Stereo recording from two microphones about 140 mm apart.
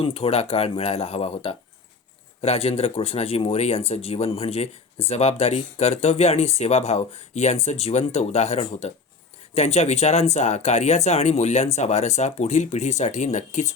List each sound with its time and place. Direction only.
0.0 s speech: 45° left (ahead or behind)